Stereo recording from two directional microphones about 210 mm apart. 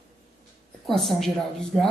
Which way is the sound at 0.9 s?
Centre (ahead or behind).